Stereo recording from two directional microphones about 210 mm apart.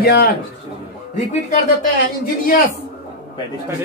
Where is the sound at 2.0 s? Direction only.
40° left (ahead or behind).